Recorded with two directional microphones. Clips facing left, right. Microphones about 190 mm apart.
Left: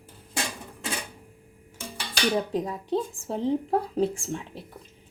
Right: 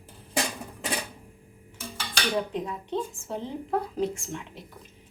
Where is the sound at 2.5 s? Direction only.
35° left (ahead or behind).